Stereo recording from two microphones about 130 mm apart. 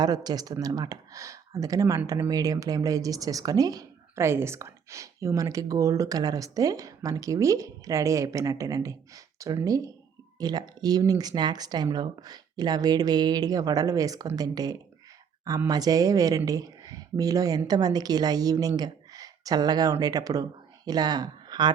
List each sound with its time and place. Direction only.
0.0 s speech: 30° right (ahead or behind)